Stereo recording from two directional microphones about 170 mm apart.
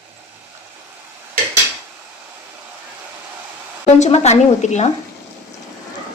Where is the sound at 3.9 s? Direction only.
40° left (ahead or behind).